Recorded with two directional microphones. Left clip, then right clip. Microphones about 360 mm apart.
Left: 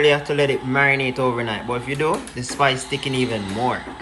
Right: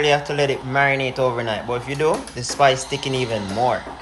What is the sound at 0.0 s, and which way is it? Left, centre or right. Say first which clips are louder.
Speech: left 1 dB; centre.